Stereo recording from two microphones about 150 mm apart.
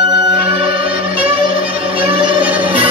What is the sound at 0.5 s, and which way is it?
Music, 40° right (ahead or behind).